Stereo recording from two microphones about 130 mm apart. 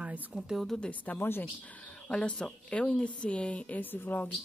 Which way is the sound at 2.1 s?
5° left (ahead or behind).